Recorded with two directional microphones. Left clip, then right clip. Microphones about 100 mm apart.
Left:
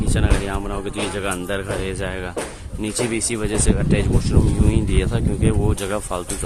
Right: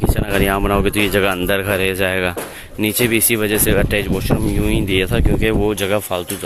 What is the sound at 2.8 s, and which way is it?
Speech, 20° right (ahead or behind).